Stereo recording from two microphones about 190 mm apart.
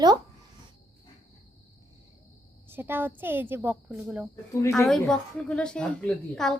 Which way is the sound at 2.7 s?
10° right (ahead or behind).